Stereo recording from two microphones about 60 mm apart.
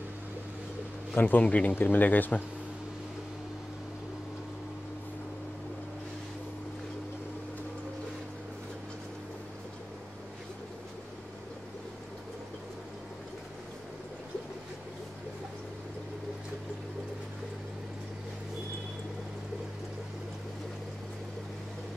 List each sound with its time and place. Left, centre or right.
1.2 s speech: left